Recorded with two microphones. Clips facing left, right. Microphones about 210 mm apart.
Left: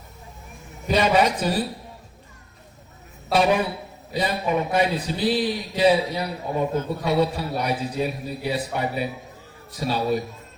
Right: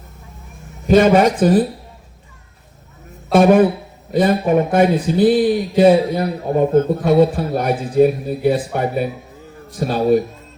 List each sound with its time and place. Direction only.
0.9 s a man's voice: 50° right (ahead or behind)
3.3 s a man's voice: 50° right (ahead or behind)